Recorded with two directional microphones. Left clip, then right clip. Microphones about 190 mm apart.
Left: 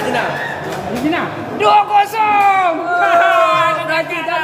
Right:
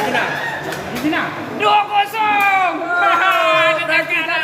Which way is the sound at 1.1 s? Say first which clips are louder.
Left 1 dB; 65° left (ahead or behind).